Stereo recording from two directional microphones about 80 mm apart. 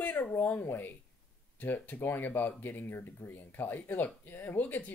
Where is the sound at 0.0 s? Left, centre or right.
Left.